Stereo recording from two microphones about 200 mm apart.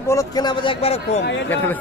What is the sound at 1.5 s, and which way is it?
Speech, 10° left (ahead or behind).